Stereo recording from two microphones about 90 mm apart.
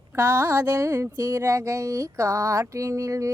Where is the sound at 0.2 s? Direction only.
20° right (ahead or behind).